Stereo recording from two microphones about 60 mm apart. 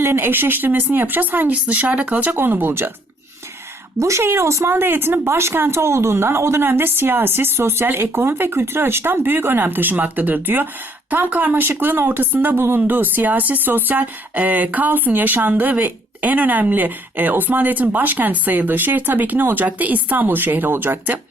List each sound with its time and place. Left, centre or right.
0.0 s speech: right
4.0 s speech: right